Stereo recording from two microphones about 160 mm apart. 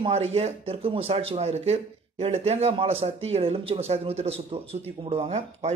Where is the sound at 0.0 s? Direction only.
40° right (ahead or behind).